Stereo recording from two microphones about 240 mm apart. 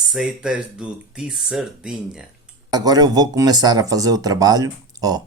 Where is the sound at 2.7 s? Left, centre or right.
Centre.